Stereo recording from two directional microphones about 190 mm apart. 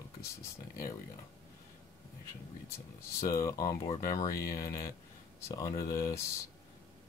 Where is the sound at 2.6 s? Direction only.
15° left (ahead or behind).